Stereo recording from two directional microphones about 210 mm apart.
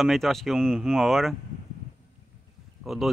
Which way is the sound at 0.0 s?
Centre (ahead or behind).